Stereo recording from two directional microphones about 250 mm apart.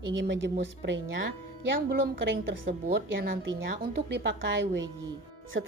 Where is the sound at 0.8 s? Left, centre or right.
Right.